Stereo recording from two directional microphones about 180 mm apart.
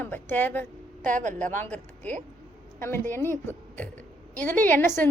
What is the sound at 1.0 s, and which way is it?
Speech, 45° right (ahead or behind).